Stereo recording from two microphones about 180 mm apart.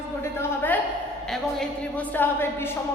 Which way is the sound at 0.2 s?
10° left (ahead or behind).